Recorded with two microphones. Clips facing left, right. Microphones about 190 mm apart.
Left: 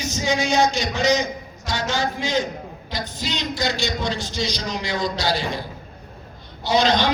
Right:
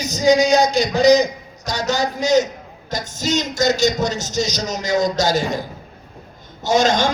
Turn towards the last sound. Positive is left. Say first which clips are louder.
# right 2 dB
turn(degrees=-45)  # may be behind; listen again after turning